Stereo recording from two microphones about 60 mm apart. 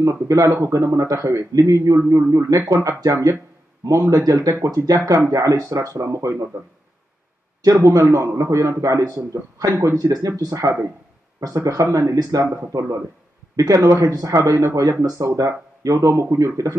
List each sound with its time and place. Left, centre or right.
0.0 s a man's voice: right
2.0 s speech: right
3.0 s speech: right
7.9 s a man's voice: right
11.3 s a man's voice: right